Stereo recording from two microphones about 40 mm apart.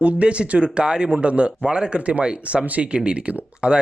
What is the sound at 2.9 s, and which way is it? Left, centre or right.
Speech, right.